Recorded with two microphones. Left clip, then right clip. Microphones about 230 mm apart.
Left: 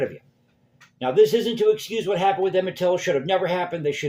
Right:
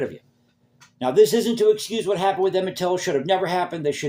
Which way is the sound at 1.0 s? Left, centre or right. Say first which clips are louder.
Right 1 dB; right.